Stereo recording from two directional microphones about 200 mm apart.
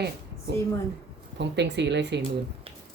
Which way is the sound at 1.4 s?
60° right (ahead or behind).